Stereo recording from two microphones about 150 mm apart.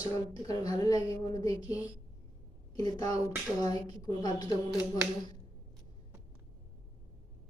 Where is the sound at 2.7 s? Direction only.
25° left (ahead or behind).